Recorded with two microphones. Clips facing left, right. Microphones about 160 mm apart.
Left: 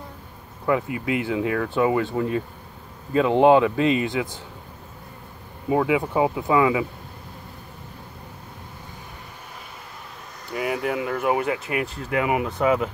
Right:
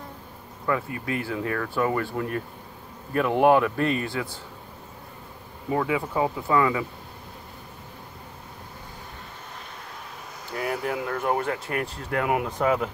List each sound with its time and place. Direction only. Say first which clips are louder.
0.7 s speech: left 4 dB; 15° left (ahead or behind)
5.7 s speech: left 4 dB; 15° left (ahead or behind)
10.5 s speech: left 3 dB; 5° left (ahead or behind)